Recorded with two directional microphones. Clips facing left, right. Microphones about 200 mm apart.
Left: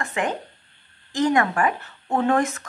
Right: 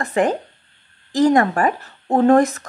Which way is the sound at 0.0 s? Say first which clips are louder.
Right 7 dB; 35° right (ahead or behind).